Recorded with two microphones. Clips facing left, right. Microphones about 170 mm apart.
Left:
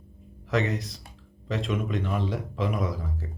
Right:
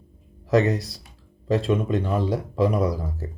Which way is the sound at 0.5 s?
35° right (ahead or behind).